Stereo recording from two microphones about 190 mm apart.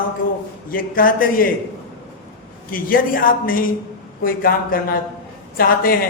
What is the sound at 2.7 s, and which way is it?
A man's voice, 50° left (ahead or behind).